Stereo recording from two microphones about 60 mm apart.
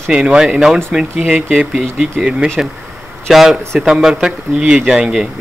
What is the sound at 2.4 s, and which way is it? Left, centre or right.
Speech, centre.